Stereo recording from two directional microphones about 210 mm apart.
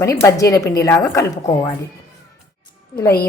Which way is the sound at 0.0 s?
15° left (ahead or behind).